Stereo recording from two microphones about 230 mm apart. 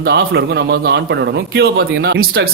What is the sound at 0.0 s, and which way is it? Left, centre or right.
Speech, right.